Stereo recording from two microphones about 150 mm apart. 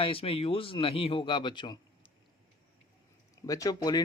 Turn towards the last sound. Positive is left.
turn(degrees=25)  # may be behind; listen again after turning